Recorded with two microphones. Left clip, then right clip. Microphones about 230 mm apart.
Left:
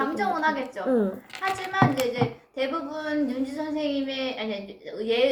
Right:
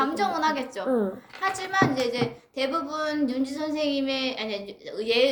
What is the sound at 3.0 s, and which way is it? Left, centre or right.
Speech, right.